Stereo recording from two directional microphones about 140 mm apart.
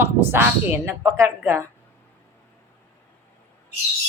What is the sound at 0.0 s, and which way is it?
Speech, 15° right (ahead or behind).